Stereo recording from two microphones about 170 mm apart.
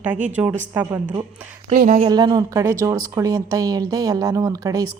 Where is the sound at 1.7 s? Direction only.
45° right (ahead or behind).